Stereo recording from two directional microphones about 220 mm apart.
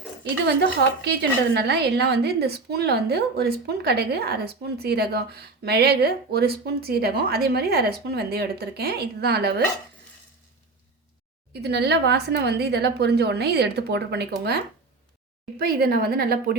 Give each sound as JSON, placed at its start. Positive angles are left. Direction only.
{"t": 0.4, "sound": "a woman's voice", "side_deg": -50}
{"t": 11.5, "sound": "a woman's voice", "side_deg": -50}